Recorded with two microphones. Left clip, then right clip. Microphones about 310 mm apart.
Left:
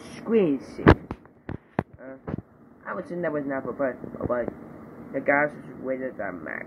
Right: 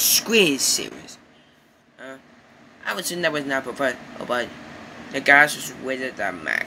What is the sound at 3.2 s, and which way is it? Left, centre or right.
Speech, right.